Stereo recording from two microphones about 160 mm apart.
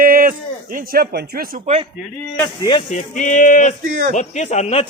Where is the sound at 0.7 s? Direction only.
70° right (ahead or behind).